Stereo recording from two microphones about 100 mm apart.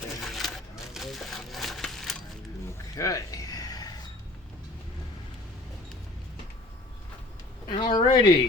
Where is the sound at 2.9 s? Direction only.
35° left (ahead or behind).